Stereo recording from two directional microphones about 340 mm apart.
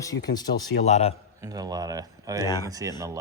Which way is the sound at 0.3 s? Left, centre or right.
Centre.